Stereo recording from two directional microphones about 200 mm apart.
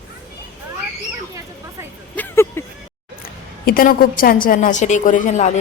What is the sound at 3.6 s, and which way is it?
A woman's voice, 45° left (ahead or behind).